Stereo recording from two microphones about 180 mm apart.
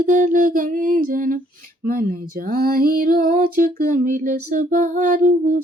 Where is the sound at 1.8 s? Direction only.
50° right (ahead or behind).